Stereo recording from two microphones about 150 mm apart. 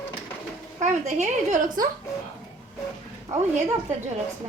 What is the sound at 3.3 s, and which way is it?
Speech, 25° right (ahead or behind).